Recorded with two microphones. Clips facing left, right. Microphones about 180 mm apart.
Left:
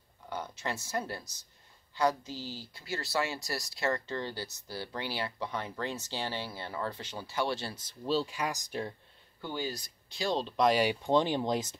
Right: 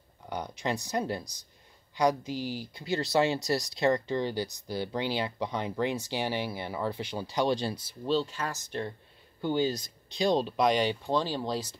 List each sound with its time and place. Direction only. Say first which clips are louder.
0.3 s speech: right 4 dB; 15° right (ahead or behind)
8.1 s speech: right 2 dB; 10° left (ahead or behind)
9.4 s speech: right 9 dB; 20° right (ahead or behind)
10.5 s speech: right 1 dB; centre (ahead or behind)
11.1 s speech: left 2 dB; 20° left (ahead or behind)